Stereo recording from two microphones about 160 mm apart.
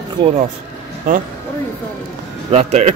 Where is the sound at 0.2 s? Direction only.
30° right (ahead or behind).